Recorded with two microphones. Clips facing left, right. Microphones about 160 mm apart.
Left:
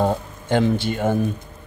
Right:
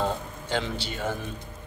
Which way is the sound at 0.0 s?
50° left (ahead or behind).